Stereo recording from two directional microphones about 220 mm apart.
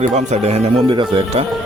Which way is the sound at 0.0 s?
30° right (ahead or behind).